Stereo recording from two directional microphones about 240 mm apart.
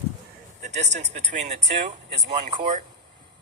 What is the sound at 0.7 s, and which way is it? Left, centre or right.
Speech, right.